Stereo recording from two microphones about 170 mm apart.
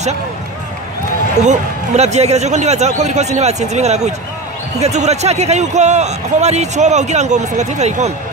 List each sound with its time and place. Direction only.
1.4 s a man's voice: 40° right (ahead or behind)